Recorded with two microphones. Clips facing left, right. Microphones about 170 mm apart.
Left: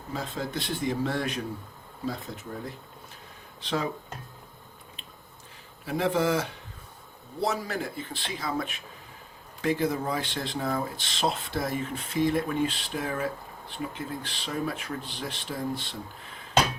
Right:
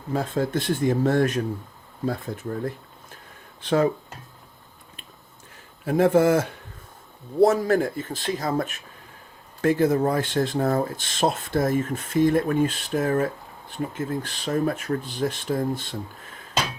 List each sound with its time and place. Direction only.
0.1 s speech: 50° right (ahead or behind)
5.8 s speech: 50° right (ahead or behind)